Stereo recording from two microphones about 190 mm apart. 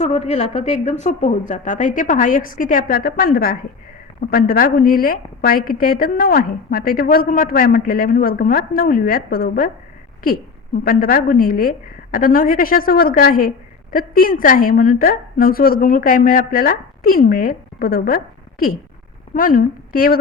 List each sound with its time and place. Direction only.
0.0 s a woman's voice: 35° left (ahead or behind); by 9.6 s 50° left (ahead or behind)
10.8 s a woman's voice: 50° left (ahead or behind)
19.3 s a woman's voice: 45° left (ahead or behind)